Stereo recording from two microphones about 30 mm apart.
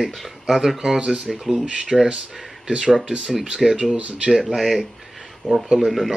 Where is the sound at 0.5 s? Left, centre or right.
Centre.